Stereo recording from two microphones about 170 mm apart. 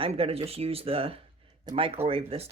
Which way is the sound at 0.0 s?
35° right (ahead or behind).